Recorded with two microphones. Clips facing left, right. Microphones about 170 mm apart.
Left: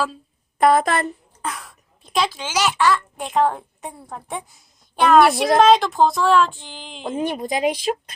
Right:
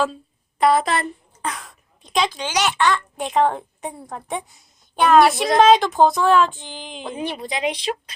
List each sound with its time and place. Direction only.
0.6 s a woman's voice: 50° left (ahead or behind)
1.4 s a child's voice: centre (ahead or behind)
7.0 s a woman's voice: 45° left (ahead or behind)